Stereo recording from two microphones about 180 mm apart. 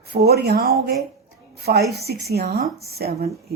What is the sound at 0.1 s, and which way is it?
A woman's voice, 60° right (ahead or behind).